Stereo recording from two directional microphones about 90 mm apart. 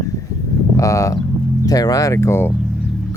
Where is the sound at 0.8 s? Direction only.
35° left (ahead or behind).